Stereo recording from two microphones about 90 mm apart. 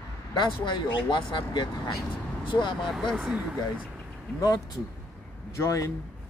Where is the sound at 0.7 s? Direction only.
60° left (ahead or behind).